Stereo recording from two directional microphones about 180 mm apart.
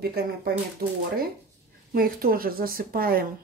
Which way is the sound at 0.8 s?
60° right (ahead or behind).